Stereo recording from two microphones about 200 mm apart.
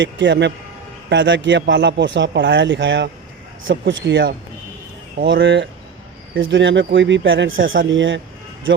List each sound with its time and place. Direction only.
0.0 s a man's voice: 60° right (ahead or behind)
6.3 s speech: 70° right (ahead or behind)